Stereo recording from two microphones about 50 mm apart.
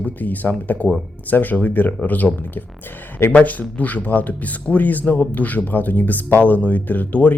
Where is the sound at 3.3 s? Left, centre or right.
Left.